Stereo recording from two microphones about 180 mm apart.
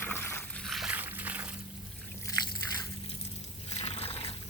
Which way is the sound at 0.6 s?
Centre (ahead or behind).